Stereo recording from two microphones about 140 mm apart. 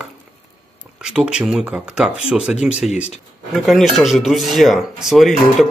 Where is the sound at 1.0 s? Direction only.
5° right (ahead or behind).